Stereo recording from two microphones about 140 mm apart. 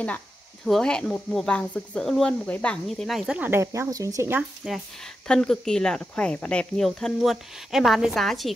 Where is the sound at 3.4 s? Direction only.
20° right (ahead or behind).